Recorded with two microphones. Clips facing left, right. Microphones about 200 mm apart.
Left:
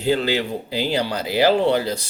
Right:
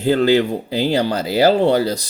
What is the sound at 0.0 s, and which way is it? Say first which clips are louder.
Speech: right 6 dB; 45° right (ahead or behind).